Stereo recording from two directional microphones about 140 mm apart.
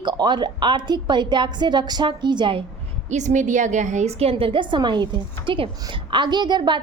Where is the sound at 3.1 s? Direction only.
60° right (ahead or behind); by 6.8 s 30° right (ahead or behind).